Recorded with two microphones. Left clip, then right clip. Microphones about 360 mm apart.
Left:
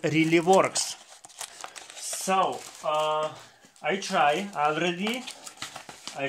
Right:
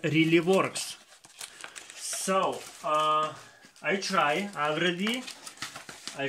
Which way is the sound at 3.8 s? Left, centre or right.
Centre.